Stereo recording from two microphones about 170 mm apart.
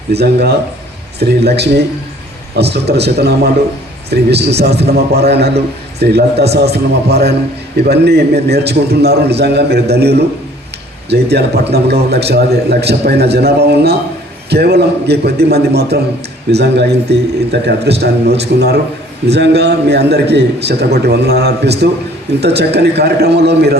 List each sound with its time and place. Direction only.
0.1 s a man's voice: 75° right (ahead or behind)